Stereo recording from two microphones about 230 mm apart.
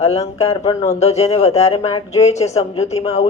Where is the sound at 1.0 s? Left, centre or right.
Left.